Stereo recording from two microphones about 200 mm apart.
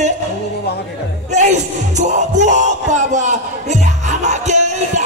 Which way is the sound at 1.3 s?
35° right (ahead or behind).